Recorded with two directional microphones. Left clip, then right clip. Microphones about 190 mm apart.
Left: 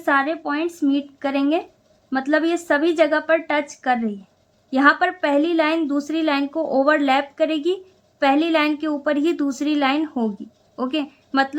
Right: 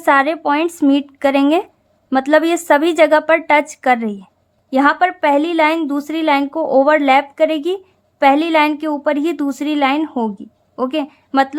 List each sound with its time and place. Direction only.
0.0 s a woman's voice: 35° right (ahead or behind)